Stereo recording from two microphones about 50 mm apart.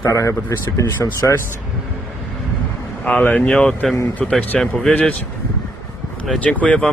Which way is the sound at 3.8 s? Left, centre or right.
Centre.